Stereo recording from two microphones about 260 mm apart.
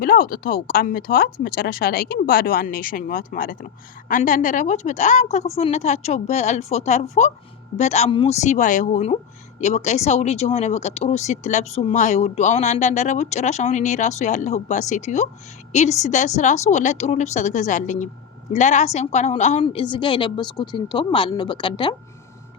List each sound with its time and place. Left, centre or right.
0.0 s speech: left; by 21.9 s centre